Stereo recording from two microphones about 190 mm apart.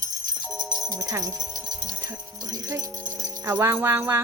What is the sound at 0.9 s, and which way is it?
Music, 20° right (ahead or behind).